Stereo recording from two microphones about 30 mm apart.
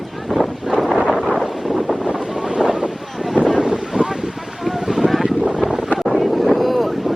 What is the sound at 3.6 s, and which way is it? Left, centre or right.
Wind noise, right.